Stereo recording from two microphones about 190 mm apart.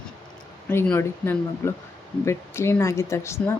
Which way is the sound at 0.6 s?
10° left (ahead or behind).